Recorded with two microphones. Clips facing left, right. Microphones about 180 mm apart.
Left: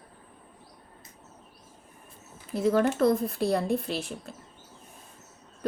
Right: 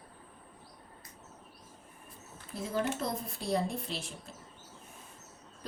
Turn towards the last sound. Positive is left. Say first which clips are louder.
# left 9 dB
turn(degrees=65)  # may be behind; listen again after turning